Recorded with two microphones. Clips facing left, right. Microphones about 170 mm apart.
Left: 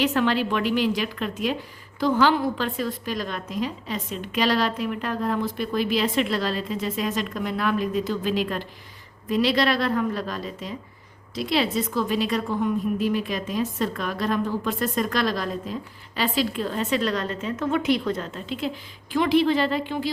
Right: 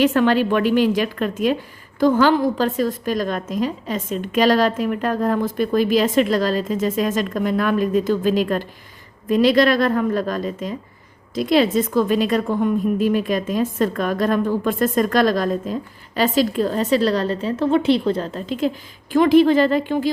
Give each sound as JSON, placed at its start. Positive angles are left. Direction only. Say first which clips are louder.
{"t": 0.0, "sound": "a woman's voice", "louder": "right 6 dB", "side_deg": -50}